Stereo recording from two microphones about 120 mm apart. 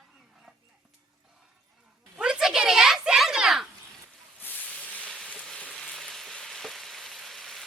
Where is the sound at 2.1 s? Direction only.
5° right (ahead or behind).